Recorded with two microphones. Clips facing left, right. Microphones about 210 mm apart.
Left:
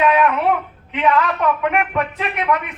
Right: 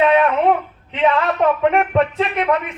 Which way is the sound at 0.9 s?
25° right (ahead or behind).